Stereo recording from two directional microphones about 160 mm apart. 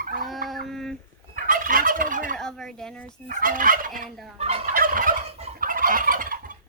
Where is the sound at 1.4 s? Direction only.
60° right (ahead or behind).